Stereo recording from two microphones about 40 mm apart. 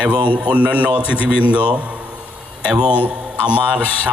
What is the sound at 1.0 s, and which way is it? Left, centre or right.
Speech, left.